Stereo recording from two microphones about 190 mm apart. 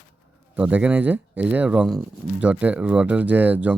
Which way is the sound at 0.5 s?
5° right (ahead or behind).